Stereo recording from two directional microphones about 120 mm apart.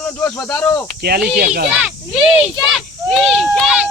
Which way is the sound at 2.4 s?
5° right (ahead or behind).